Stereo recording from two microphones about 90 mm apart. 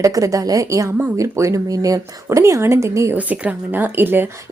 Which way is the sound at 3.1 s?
15° right (ahead or behind).